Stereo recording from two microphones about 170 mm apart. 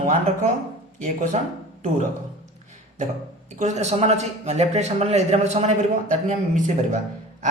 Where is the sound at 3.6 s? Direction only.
40° right (ahead or behind).